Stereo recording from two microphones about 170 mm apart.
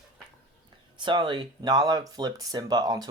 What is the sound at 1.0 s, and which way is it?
Speech, 25° right (ahead or behind).